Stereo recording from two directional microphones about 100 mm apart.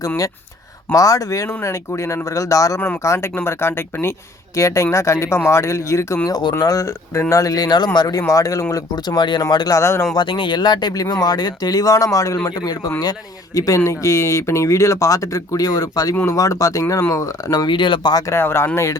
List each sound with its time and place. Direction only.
0.9 s speech: 35° left (ahead or behind)
6.2 s speech: 40° left (ahead or behind)
8.7 s speech: 45° left (ahead or behind)
9.7 s speech: 30° left (ahead or behind)
10.2 s speech: 55° left (ahead or behind)
18.1 s speech: 35° left (ahead or behind)
18.3 s speech: 20° left (ahead or behind)